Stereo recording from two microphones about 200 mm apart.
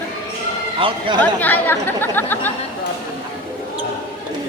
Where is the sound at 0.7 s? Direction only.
25° right (ahead or behind).